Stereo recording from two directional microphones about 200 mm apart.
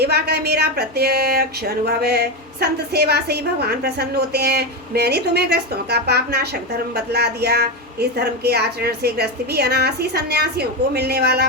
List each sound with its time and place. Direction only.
0.0 s speech: 55° right (ahead or behind)